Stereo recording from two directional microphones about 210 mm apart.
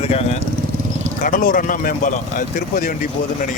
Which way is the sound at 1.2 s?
40° left (ahead or behind).